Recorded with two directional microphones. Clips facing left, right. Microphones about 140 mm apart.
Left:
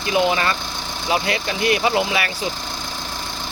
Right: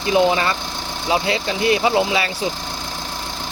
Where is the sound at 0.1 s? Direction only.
25° right (ahead or behind).